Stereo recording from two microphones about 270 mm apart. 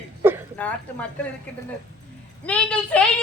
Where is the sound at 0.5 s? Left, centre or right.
Centre.